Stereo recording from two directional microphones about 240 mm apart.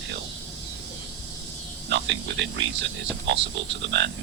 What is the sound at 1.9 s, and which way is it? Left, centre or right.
Speech, right.